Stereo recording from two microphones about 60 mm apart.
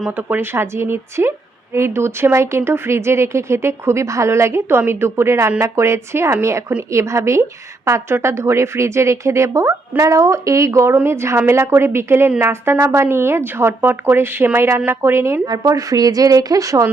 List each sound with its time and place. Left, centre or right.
0.2 s a woman's voice: right
15.4 s a woman's voice: right